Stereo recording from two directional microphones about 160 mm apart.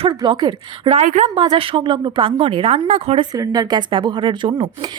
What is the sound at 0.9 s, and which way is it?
Speech, 50° right (ahead or behind).